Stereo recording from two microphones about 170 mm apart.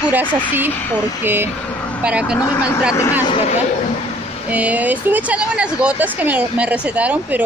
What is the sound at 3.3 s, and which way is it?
Speech, 40° left (ahead or behind).